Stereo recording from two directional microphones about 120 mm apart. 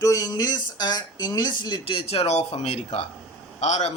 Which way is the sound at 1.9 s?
55° left (ahead or behind).